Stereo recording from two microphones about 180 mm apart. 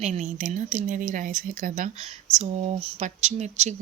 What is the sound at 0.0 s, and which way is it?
Speech, 40° right (ahead or behind).